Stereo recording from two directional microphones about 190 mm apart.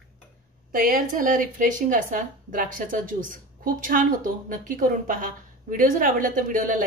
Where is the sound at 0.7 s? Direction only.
45° right (ahead or behind).